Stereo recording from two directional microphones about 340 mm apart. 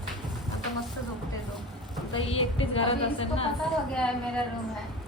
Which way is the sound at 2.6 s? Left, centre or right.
Centre.